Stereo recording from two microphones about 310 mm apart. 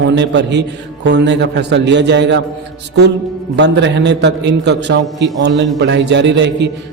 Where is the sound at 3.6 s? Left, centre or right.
Right.